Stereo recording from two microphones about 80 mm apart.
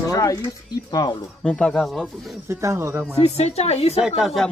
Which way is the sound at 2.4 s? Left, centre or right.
Right.